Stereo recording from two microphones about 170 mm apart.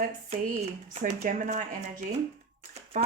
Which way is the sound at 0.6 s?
40° right (ahead or behind).